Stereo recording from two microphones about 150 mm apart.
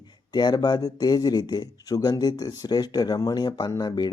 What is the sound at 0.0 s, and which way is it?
Speech, 30° left (ahead or behind).